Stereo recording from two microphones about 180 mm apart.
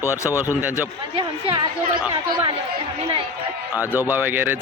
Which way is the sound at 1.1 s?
25° right (ahead or behind).